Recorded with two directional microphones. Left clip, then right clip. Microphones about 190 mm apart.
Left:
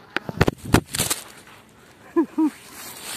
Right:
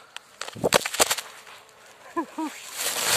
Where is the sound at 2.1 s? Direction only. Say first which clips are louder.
Left 9 dB; 30° right (ahead or behind).